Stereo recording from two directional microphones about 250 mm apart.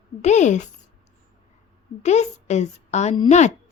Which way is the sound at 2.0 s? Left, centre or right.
Left.